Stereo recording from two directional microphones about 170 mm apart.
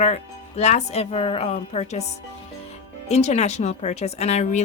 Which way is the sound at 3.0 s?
40° left (ahead or behind).